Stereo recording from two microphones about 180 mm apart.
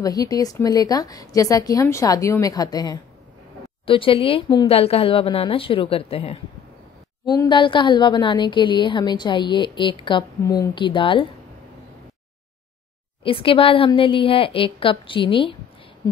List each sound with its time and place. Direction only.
0.0 s a woman's voice: 20° left (ahead or behind)
13.2 s a woman's voice: 30° left (ahead or behind)